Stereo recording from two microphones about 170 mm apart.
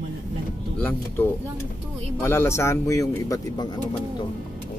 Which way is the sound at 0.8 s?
10° left (ahead or behind).